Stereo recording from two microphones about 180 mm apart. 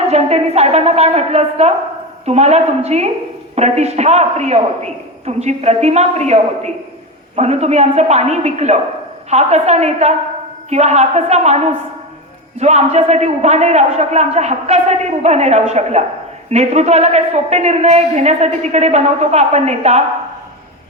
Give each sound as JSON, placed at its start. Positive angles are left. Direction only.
{"t": 0.1, "sound": "a woman's voice", "side_deg": -35}
{"t": 12.5, "sound": "a woman's voice", "side_deg": -40}